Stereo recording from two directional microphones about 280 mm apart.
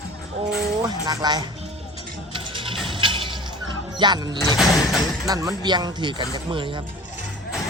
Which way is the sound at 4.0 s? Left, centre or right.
Centre.